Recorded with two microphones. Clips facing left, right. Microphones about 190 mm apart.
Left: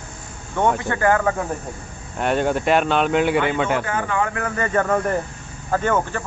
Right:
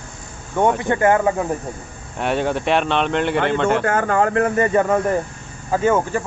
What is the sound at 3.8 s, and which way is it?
Speech, 50° right (ahead or behind).